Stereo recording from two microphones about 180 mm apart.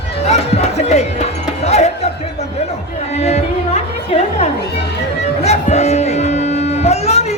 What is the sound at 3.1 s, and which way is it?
Music, 35° left (ahead or behind).